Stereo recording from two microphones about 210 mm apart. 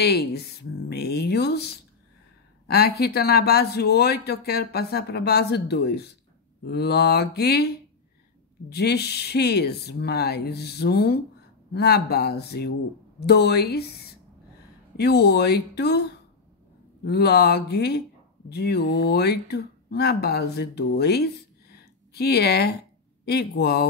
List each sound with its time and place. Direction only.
0.0 s speech: 50° left (ahead or behind)
2.7 s speech: 50° left (ahead or behind)
8.6 s speech: 50° left (ahead or behind)